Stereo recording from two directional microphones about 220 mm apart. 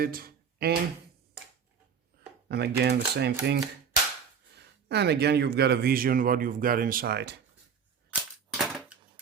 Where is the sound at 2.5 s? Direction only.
45° right (ahead or behind).